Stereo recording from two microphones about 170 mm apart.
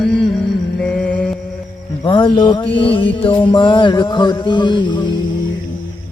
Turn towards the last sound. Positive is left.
turn(degrees=25)  # may be behind; listen again after turning